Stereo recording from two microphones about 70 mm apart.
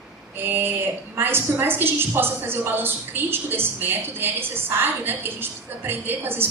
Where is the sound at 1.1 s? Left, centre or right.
Right.